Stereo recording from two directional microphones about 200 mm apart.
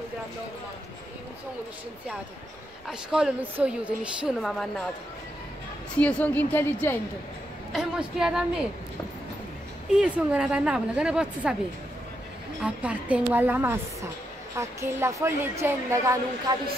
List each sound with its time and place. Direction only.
2.9 s a woman's voice: 5° right (ahead or behind)
5.9 s a woman's voice: 5° left (ahead or behind)
7.7 s a woman's voice: 5° right (ahead or behind)
9.9 s a woman's voice: 5° right (ahead or behind)
12.6 s a woman's voice: 5° right (ahead or behind)